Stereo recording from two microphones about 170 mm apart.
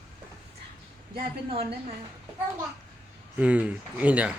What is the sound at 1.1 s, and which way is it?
Speech, 30° right (ahead or behind).